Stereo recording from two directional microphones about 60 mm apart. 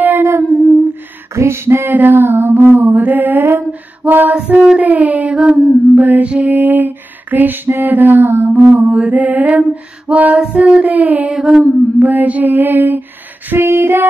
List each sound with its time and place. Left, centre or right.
0.0 s humming: right
1.3 s female singing: right
4.7 s a sound: right
5.9 s music: right
6.4 s lullaby: right
8.9 s mantra: right
9.6 s female singing: right
10.4 s child singing: centre
11.4 s a sound: right
13.6 s female singing: right